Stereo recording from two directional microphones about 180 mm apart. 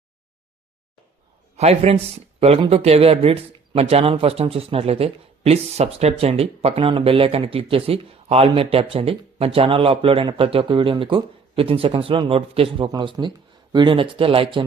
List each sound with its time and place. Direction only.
1.5 s speech: 35° right (ahead or behind)